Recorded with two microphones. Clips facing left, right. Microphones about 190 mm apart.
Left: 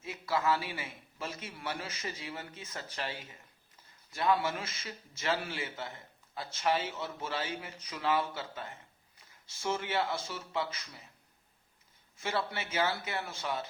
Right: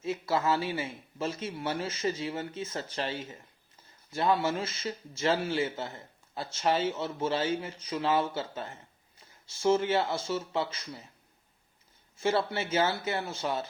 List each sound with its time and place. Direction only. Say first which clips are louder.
0.0 s a man's voice: right 3 dB; 30° right (ahead or behind)
12.1 s a man's voice: right 7 dB; 30° right (ahead or behind)